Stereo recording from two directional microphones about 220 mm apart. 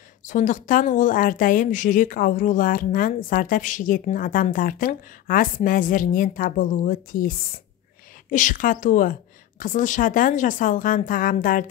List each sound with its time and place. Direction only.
0.3 s speech: 35° left (ahead or behind)